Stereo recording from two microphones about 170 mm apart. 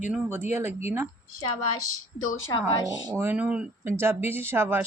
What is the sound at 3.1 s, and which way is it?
Speech, 10° right (ahead or behind).